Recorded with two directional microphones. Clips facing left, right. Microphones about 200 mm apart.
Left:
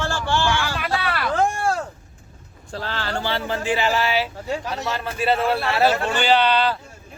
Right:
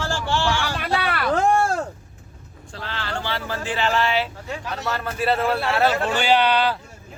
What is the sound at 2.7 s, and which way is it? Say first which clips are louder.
Speech: left 3 dB; 40° left (ahead or behind).